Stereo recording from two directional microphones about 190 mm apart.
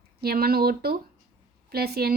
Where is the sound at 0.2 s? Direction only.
55° right (ahead or behind).